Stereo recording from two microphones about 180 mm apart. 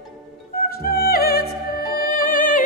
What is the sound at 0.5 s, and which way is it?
Music, 55° left (ahead or behind).